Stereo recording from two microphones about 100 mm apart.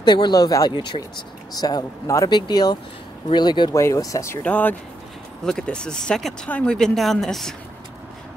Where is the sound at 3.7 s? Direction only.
35° left (ahead or behind).